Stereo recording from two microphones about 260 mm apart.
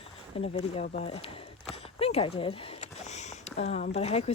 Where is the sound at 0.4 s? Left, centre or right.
Left.